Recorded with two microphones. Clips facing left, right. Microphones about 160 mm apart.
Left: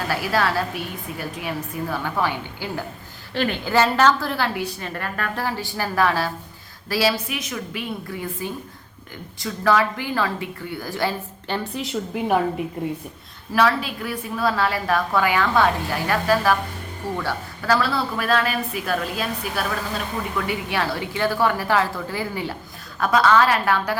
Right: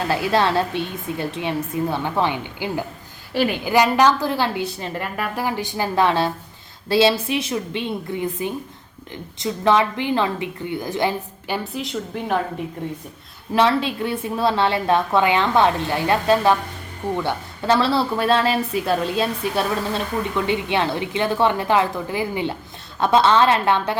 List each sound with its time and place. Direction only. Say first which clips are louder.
0.1 s a woman's voice: right 3 dB; 25° right (ahead or behind)
5.1 s speech: right 2 dB; 15° right (ahead or behind)
11.8 s speech: left 1 dB; 5° left (ahead or behind)
13.5 s speech: right 2 dB; 25° right (ahead or behind)